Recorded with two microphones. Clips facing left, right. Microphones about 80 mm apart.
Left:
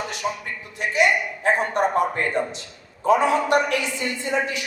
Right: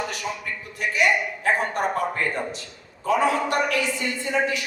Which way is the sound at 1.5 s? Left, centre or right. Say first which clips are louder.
Left 3 dB; left.